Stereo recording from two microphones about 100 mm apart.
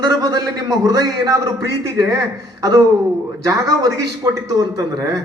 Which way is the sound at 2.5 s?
40° right (ahead or behind).